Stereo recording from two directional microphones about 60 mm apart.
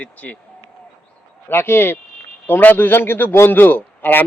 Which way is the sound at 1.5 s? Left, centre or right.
Left.